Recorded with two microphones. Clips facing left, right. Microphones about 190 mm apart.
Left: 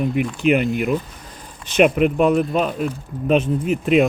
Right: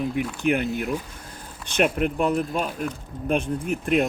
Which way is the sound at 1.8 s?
70° left (ahead or behind).